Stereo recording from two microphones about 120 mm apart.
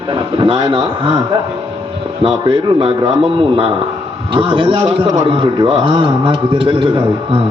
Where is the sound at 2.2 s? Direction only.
45° right (ahead or behind).